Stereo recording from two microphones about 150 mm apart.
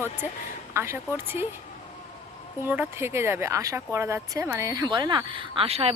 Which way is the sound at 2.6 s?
15° right (ahead or behind).